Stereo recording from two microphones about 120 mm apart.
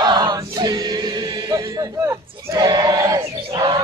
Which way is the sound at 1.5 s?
25° right (ahead or behind).